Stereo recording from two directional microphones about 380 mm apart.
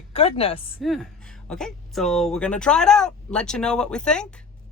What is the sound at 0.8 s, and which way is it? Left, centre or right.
Speech, centre.